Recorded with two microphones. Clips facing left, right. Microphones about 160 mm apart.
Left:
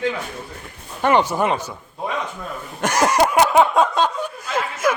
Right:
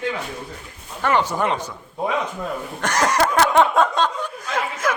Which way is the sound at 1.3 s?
5° left (ahead or behind).